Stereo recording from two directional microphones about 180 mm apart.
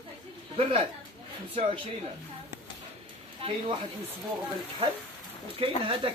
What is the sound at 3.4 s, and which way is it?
Speech, 30° right (ahead or behind).